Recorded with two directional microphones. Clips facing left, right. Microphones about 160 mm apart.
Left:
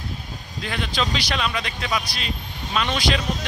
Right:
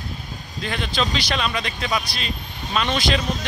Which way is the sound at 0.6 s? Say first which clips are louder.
Right 1 dB; 5° left (ahead or behind).